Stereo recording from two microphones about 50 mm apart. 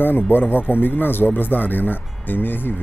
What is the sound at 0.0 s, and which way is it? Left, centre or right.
Speech, left.